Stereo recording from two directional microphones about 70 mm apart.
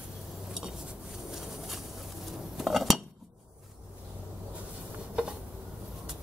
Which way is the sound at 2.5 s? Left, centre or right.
Centre.